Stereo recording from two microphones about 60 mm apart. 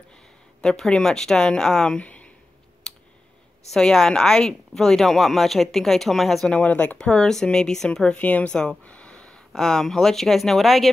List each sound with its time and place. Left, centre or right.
0.6 s a woman's voice: centre
2.9 s computer keyboard: centre
3.7 s a woman's voice: centre
6.5 s a woman's voice: left
8.2 s a sound: left
9.5 s a woman's voice: centre